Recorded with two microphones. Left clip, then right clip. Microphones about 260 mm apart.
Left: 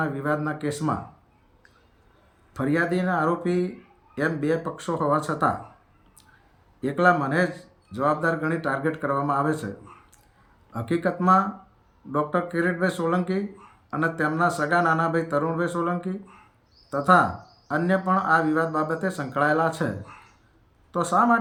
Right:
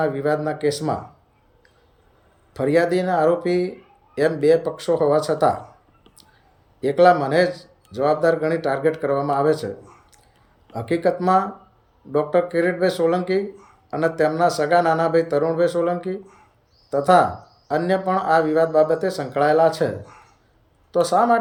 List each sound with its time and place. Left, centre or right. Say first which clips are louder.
0.3 s speech: right 6 dB; left
2.5 s speech: right 6 dB; left
6.8 s speech: right 6 dB; left
20.9 s speech: right 4 dB; left